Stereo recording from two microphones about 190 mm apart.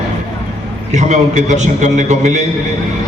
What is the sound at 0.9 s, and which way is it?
A man's voice, 40° right (ahead or behind).